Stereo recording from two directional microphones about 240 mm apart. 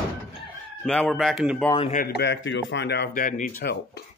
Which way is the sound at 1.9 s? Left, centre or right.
Left.